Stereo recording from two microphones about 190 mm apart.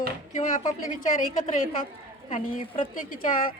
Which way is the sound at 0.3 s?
45° left (ahead or behind).